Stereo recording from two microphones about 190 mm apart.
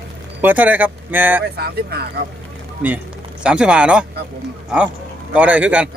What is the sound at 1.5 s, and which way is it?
Speech, 55° right (ahead or behind).